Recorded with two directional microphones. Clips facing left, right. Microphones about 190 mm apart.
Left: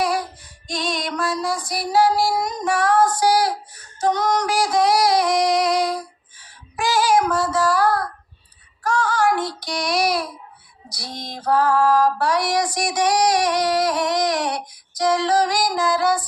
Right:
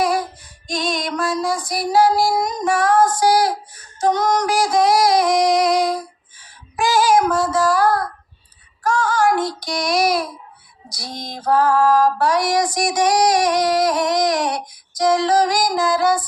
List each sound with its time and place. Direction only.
0.7 s female singing: 45° right (ahead or behind)
6.4 s child singing: 45° right (ahead or behind)
10.8 s female singing: 45° right (ahead or behind)